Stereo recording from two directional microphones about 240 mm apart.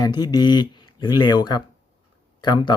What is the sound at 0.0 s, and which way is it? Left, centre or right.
Speech, centre.